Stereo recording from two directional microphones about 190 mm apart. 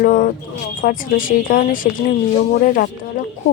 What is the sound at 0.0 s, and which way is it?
A woman's voice, 45° left (ahead or behind).